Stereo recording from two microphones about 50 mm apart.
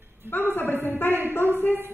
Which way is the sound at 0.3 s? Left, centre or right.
Left.